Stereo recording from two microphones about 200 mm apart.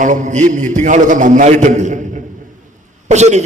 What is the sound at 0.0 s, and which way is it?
A man's voice, 40° right (ahead or behind).